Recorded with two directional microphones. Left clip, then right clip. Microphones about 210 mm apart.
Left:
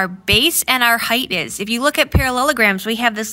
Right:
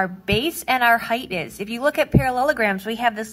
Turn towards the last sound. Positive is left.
turn(degrees=45)  # may be behind; listen again after turning